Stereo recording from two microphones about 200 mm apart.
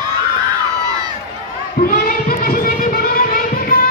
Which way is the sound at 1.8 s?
40° left (ahead or behind).